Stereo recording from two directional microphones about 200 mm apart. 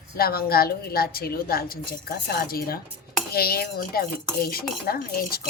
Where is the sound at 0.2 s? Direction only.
50° left (ahead or behind).